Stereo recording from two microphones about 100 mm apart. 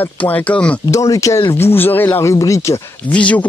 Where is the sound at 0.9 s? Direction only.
35° left (ahead or behind).